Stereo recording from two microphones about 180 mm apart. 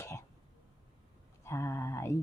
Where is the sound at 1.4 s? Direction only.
15° left (ahead or behind).